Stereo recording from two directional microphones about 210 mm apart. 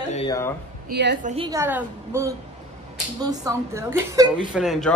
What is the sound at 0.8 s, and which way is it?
Speech, 50° right (ahead or behind).